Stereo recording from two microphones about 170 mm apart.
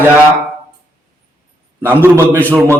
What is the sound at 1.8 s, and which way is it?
Speech, 10° right (ahead or behind).